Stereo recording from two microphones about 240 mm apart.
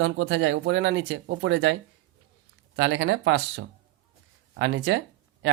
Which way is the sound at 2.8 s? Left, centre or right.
Right.